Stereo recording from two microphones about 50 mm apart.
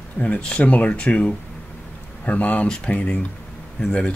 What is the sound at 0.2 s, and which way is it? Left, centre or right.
Speech, left.